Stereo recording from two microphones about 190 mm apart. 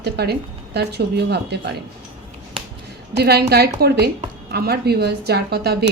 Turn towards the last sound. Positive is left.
turn(degrees=-60)  # may be behind; listen again after turning